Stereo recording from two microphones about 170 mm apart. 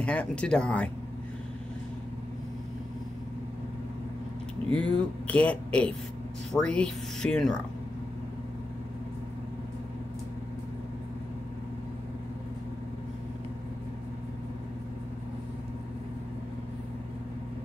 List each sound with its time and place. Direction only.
0.0 s speech: 5° left (ahead or behind)
4.6 s speech: 5° left (ahead or behind)